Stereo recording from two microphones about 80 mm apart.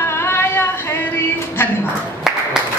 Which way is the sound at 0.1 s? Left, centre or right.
Left.